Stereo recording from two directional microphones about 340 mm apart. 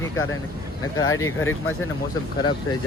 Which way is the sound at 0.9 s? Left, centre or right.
Left.